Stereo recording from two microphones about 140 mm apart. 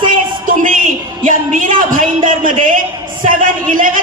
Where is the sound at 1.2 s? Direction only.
70° right (ahead or behind).